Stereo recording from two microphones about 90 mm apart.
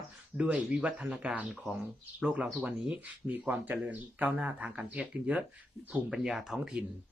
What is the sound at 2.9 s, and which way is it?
Speech, 15° right (ahead or behind).